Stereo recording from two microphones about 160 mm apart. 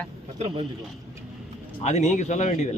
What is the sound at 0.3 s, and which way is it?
Speech, 35° right (ahead or behind).